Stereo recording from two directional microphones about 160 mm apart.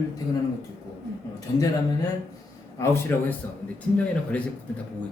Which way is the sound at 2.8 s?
15° left (ahead or behind).